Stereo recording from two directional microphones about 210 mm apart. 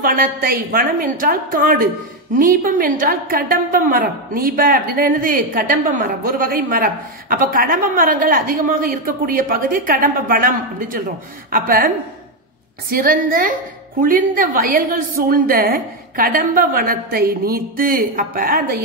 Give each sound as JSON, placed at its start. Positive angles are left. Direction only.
{"t": 0.0, "sound": "a woman's voice", "side_deg": -45}
{"t": 12.9, "sound": "a woman's voice", "side_deg": -40}